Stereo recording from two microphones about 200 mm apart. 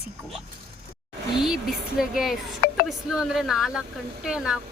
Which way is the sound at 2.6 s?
45° left (ahead or behind).